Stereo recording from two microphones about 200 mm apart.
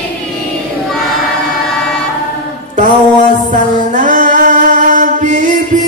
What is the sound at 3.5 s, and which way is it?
Music, 40° right (ahead or behind).